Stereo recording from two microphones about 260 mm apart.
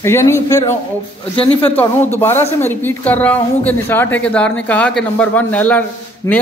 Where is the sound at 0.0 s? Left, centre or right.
Centre.